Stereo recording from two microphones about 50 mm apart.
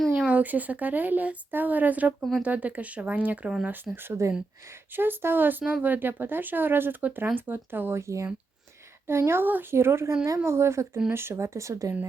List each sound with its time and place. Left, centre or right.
0.3 s speech: right
3.9 s speech: right
7.9 s speech: right
9.0 s speech: right
9.5 s speech: right
9.7 s speech: right
10.2 s speech: right
11.1 s speech: right